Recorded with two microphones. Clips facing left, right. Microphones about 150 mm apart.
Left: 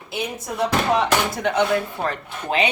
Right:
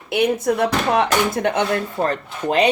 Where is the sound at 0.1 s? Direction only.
60° right (ahead or behind).